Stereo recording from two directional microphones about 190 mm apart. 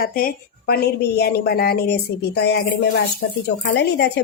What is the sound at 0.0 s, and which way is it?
A woman's voice, 50° left (ahead or behind).